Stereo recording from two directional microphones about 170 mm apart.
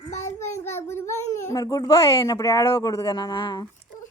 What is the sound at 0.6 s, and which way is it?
A child's voice, 15° left (ahead or behind).